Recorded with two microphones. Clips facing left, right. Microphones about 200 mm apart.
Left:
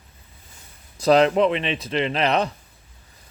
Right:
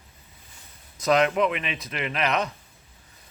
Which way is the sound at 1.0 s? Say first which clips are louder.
Left 5 dB; 30° left (ahead or behind).